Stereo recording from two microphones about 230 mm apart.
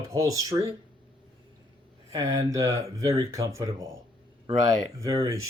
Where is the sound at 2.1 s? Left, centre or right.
Centre.